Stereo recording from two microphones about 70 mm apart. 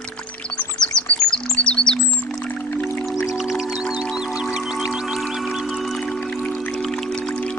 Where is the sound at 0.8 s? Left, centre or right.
Centre.